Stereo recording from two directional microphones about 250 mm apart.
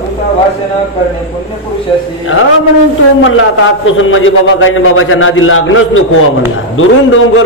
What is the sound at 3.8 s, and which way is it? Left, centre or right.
A man's voice, left.